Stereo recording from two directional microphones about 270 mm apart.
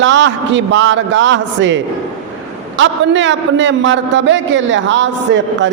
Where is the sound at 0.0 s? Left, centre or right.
Right.